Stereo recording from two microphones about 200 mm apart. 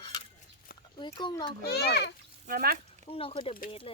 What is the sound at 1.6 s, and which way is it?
Speech, 55° left (ahead or behind).